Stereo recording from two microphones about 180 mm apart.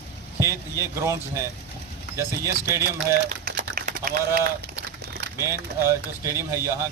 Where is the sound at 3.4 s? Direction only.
65° right (ahead or behind).